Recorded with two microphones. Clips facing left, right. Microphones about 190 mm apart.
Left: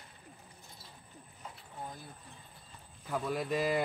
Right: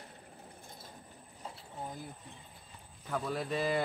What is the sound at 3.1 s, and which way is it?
Speech, 5° left (ahead or behind).